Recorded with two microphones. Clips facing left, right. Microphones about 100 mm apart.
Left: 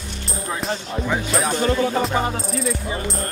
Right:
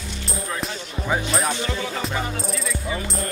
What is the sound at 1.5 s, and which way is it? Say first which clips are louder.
Music: left 8 dB; 45° left (ahead or behind).